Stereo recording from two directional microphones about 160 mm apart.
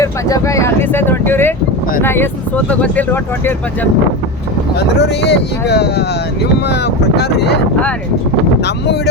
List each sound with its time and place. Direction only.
0.0 s speech: 20° left (ahead or behind)
4.8 s speech: 90° left